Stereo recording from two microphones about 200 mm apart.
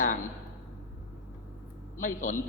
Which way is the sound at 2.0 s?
40° left (ahead or behind).